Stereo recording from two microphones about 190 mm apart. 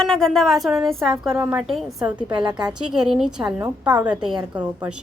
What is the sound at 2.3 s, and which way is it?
Speech, 25° right (ahead or behind).